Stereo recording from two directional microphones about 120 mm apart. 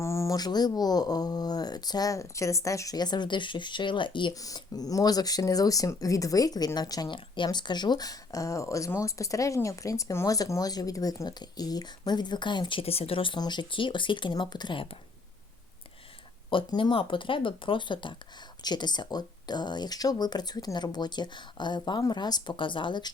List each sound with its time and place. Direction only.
0.0 s speech: 25° left (ahead or behind); by 14.9 s 45° left (ahead or behind)
16.5 s speech: 45° left (ahead or behind)